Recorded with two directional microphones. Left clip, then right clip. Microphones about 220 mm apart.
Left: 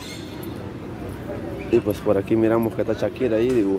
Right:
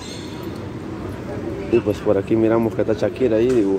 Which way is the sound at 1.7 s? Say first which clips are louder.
Right 2 dB; 10° left (ahead or behind).